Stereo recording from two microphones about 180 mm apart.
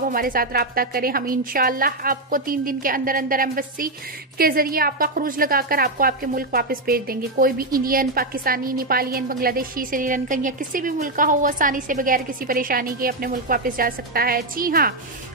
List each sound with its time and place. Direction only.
0.1 s a woman's voice: 50° right (ahead or behind)